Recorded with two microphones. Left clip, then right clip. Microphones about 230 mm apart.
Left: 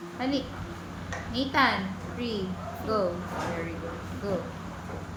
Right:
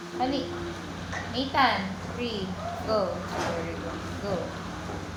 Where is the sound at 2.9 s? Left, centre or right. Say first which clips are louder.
Right 1 dB; left.